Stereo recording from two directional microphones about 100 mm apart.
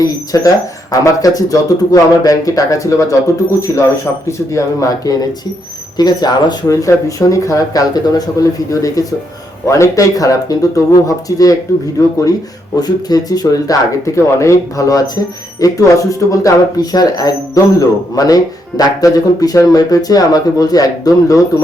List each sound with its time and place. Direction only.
0.0 s speech: 40° left (ahead or behind)
12.7 s speech: 40° left (ahead or behind)